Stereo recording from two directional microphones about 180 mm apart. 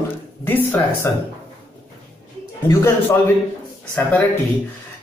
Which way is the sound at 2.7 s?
15° left (ahead or behind).